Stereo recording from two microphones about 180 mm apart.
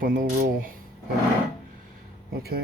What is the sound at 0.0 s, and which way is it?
Speech, 55° right (ahead or behind).